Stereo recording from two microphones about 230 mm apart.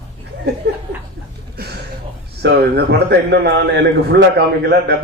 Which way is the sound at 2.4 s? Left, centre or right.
Right.